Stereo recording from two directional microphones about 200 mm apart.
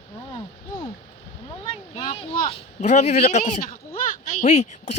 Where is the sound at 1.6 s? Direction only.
25° left (ahead or behind).